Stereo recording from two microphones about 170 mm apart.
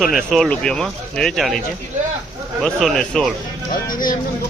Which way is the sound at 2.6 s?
Centre (ahead or behind).